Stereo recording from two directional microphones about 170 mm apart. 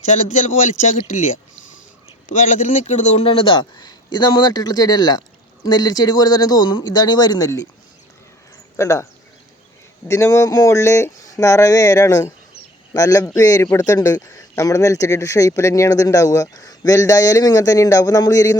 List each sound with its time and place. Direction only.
0.0 s speech: 45° left (ahead or behind)
2.6 s speech: 45° left (ahead or behind); by 7.7 s 20° left (ahead or behind)
8.7 s speech: 15° left (ahead or behind)
10.1 s speech: 15° left (ahead or behind)